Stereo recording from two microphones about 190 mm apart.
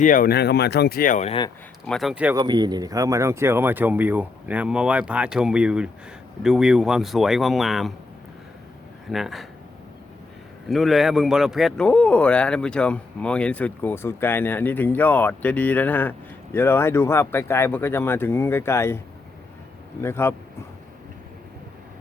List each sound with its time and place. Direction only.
0.0 s speech: 45° left (ahead or behind)
1.9 s speech: centre (ahead or behind)
2.3 s speech: 20° right (ahead or behind); by 7.9 s centre (ahead or behind)
9.0 s speech: centre (ahead or behind)
10.7 s a man's voice: centre (ahead or behind)
20.0 s a man's voice: 15° left (ahead or behind)